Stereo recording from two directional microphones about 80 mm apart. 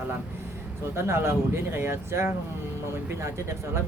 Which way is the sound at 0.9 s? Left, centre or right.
Right.